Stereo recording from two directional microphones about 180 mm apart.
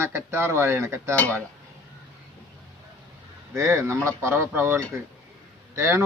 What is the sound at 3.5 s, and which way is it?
A man's voice, 15° right (ahead or behind).